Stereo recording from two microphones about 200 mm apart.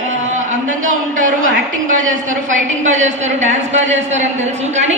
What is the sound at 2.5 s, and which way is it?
A woman's voice, 35° right (ahead or behind).